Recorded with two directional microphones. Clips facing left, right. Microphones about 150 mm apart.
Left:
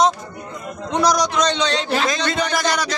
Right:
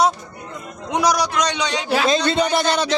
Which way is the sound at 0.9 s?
10° right (ahead or behind).